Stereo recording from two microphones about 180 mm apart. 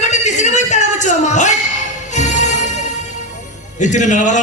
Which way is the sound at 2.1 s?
40° left (ahead or behind).